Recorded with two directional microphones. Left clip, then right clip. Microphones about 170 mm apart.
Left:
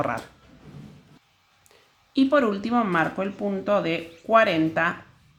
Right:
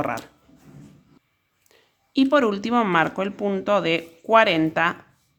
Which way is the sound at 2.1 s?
20° right (ahead or behind).